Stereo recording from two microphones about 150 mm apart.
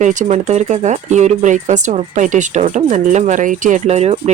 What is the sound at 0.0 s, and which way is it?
Speech, 55° right (ahead or behind).